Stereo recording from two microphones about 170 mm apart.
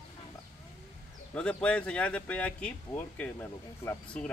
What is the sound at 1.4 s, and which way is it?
Speech, 5° left (ahead or behind).